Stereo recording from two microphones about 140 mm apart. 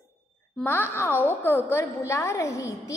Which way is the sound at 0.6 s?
15° left (ahead or behind).